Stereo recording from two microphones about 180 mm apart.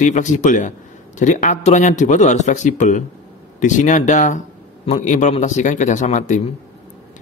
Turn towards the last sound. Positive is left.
turn(degrees=40)  # may be behind; listen again after turning